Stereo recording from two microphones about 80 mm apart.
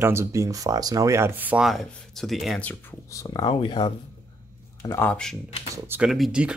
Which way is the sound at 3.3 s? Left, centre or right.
Left.